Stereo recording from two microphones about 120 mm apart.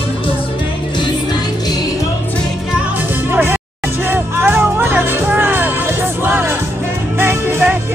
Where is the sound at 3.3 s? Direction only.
20° right (ahead or behind).